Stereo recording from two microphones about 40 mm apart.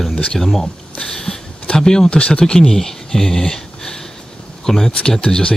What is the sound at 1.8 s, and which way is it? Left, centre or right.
Speech, centre.